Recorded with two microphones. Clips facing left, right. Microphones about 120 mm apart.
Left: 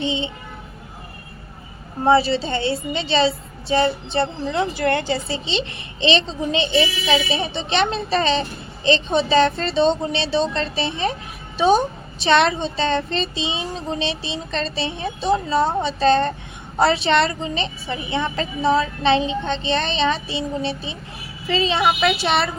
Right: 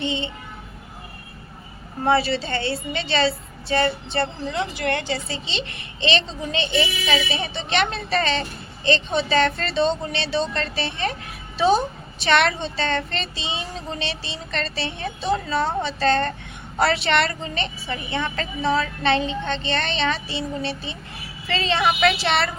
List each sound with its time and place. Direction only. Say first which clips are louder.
0.0 s a woman's voice: left 2 dB; 20° left (ahead or behind)
2.0 s a woman's voice: left 4 dB; 20° left (ahead or behind)
4.5 s a woman's voice: left 5 dB; 30° left (ahead or behind); by 22.4 s 15° left (ahead or behind)